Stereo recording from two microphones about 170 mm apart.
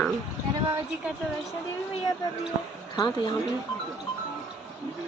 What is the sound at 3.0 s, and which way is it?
Speech, 25° left (ahead or behind).